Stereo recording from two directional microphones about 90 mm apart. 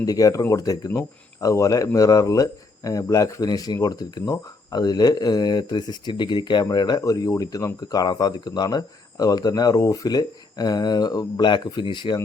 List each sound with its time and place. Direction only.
0.0 s speech: 40° left (ahead or behind); by 12.1 s 60° left (ahead or behind)